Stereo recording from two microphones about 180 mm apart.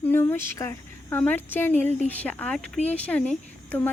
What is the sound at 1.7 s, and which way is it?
Speech, 40° right (ahead or behind).